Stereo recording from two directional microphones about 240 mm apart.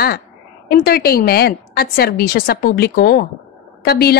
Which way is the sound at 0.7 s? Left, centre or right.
Left.